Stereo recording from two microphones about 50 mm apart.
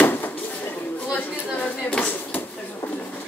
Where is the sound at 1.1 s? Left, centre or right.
Left.